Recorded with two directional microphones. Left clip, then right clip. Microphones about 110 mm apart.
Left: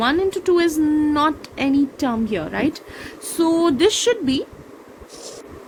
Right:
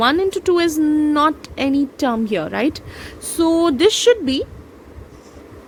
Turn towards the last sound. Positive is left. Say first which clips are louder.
# right 4 dB
turn(degrees=-55)  # may be behind; listen again after turning